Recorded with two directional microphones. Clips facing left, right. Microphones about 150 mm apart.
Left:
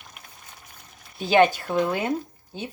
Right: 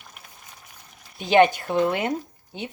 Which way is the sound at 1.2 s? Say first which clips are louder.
Right 1 dB; 20° right (ahead or behind).